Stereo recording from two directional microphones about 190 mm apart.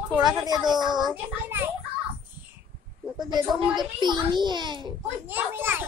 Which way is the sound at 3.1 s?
20° right (ahead or behind).